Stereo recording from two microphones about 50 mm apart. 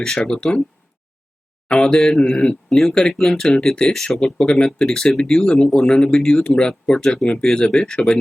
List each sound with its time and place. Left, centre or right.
0.3 s speech: centre
1.6 s speech: centre